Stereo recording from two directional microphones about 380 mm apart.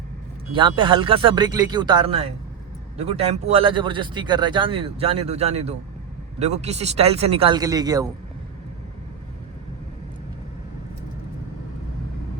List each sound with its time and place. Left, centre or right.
0.5 s speech: centre